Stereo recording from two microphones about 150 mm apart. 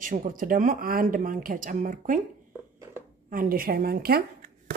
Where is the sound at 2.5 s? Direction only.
15° right (ahead or behind).